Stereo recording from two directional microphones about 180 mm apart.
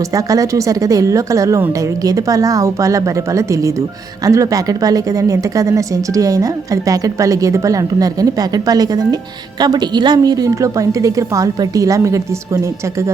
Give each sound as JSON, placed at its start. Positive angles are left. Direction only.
{"t": 0.1, "sound": "a woman's voice", "side_deg": -20}